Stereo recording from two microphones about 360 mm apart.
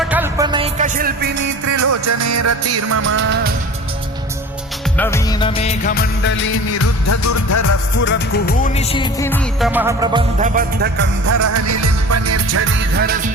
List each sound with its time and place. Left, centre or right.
0.1 s music: centre; by 1.3 s right
1.4 s music: right
4.9 s music of bollywood: centre; by 7.7 s left
8.0 s music: left; by 11.1 s right
11.3 s music: right